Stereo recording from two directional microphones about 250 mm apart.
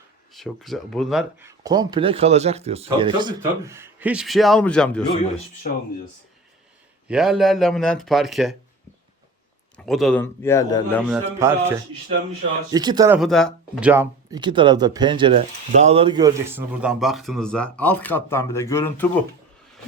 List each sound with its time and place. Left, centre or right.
0.3 s speech: centre
5.7 s speech: left
7.1 s speech: centre
9.7 s speech: centre
11.3 s speech: centre
12.7 s speech: centre
13.1 s speech: centre
16.8 s speech: centre